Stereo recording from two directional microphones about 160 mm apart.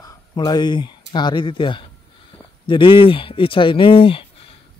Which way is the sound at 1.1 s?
30° left (ahead or behind).